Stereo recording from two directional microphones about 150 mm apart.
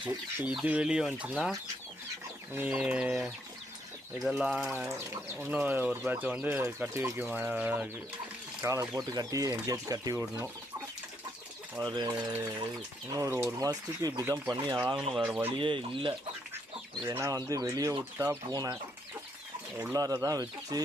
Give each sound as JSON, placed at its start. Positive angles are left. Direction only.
{"t": 0.4, "sound": "speech", "side_deg": -10}
{"t": 4.7, "sound": "speech", "side_deg": -15}
{"t": 8.6, "sound": "speech", "side_deg": -20}
{"t": 11.9, "sound": "speech", "side_deg": -25}
{"t": 15.1, "sound": "speech", "side_deg": -10}
{"t": 15.4, "sound": "speech", "side_deg": -35}
{"t": 17.0, "sound": "speech", "side_deg": -20}
{"t": 19.8, "sound": "speech", "side_deg": -20}